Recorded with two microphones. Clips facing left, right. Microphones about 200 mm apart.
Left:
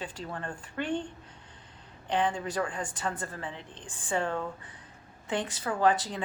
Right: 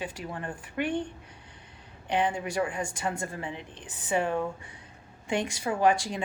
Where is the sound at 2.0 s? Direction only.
10° right (ahead or behind).